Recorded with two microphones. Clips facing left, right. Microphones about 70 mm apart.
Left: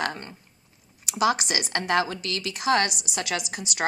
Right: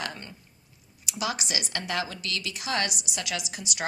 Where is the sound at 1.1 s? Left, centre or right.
Left.